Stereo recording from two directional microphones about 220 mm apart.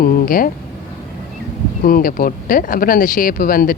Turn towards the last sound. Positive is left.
turn(degrees=40)  # may be behind; listen again after turning